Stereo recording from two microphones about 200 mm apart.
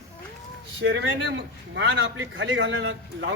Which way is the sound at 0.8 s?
65° right (ahead or behind).